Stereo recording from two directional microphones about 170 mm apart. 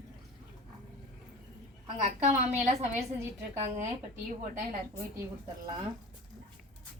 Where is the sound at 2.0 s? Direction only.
45° right (ahead or behind).